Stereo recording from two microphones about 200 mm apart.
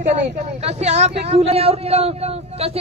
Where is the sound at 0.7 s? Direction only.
35° right (ahead or behind).